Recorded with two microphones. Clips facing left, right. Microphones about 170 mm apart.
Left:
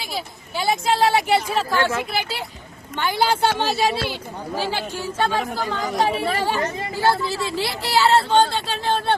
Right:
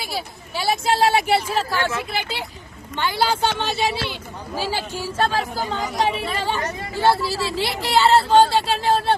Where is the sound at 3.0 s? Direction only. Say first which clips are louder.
Left 1 dB; 15° left (ahead or behind).